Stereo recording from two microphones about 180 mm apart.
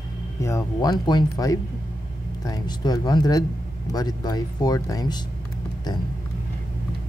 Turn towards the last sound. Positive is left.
turn(degrees=20)  # may be behind; listen again after turning